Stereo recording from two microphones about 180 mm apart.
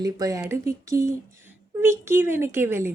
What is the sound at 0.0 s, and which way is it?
A woman's voice, 20° right (ahead or behind).